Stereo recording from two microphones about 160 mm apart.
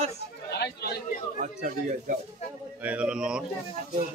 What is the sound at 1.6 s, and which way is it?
Speech, 55° right (ahead or behind).